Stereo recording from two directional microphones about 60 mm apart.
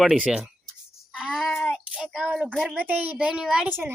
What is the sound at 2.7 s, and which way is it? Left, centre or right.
Speech, right.